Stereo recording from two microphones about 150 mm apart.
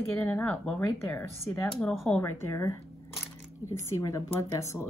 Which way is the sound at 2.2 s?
15° left (ahead or behind).